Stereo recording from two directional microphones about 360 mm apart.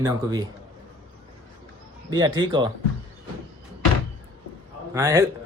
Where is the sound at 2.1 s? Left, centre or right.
Centre.